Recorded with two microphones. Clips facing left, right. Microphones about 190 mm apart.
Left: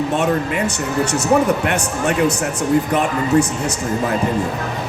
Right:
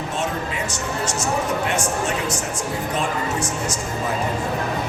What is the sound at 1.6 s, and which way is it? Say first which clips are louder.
Speech: left 4 dB; 65° left (ahead or behind).